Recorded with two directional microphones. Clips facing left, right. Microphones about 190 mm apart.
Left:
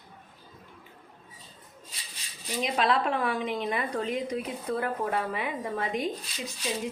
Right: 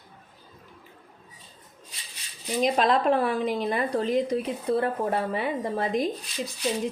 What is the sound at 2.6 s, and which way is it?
A woman's voice, 40° right (ahead or behind).